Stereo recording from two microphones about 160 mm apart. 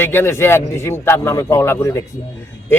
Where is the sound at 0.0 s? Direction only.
15° left (ahead or behind).